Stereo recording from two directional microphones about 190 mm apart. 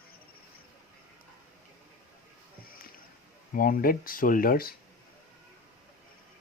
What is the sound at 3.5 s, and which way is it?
Speech, 50° left (ahead or behind).